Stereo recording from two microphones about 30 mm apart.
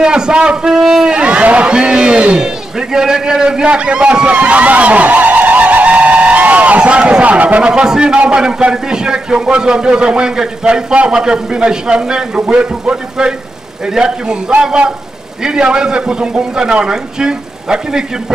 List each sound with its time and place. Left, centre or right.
0.0 s a man's voice: right
1.1 s speech: right
1.7 s speech: right
2.4 s a man's voice: right
3.7 s speech: right
4.4 s vehicle: right
6.8 s speech: right
7.2 s speech: right
7.6 s a man's voice: right
12.4 s a man's voice: right
15.4 s a man's voice: right